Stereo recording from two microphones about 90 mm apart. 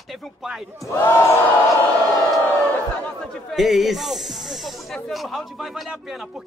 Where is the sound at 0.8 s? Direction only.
30° left (ahead or behind).